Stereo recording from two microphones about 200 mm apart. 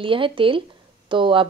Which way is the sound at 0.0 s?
25° right (ahead or behind).